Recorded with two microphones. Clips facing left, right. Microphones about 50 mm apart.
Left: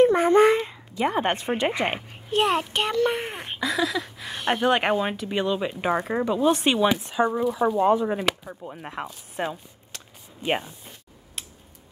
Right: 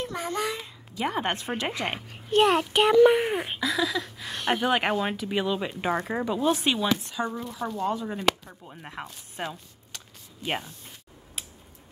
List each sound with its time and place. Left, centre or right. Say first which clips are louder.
0.0 s a sound: left 14 dB; left
0.9 s speech: left 4 dB; centre
2.2 s a child's voice: right 2 dB; centre
6.8 s speech: left 6 dB; centre
8.2 s speech: even; centre